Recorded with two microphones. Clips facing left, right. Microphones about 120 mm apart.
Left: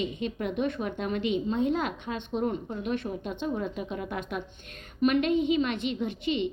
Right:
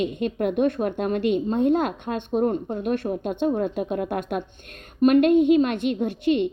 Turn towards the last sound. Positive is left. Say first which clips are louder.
# right 7 dB
turn(degrees=-55)  # may be behind; listen again after turning